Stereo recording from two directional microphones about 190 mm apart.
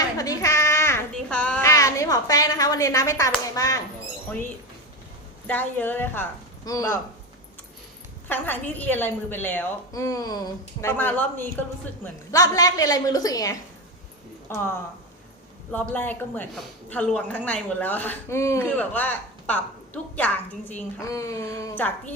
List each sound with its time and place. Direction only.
0.0 s a sound: 20° left (ahead or behind)
1.7 s speech: 15° left (ahead or behind)
5.5 s a woman's voice: 10° left (ahead or behind)
8.3 s a woman's voice: 10° left (ahead or behind)